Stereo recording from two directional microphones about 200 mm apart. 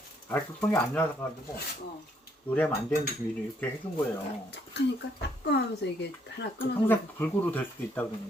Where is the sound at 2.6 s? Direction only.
10° left (ahead or behind).